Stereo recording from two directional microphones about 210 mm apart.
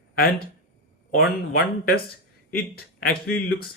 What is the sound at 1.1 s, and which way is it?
Speech, 50° left (ahead or behind).